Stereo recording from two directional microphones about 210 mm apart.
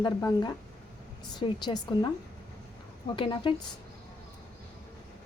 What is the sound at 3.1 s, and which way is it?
Speech, 25° left (ahead or behind).